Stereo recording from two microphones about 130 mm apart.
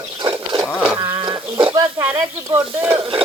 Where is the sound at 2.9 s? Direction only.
45° right (ahead or behind).